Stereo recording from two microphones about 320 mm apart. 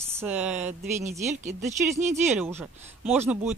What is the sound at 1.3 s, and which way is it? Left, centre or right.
Speech, right.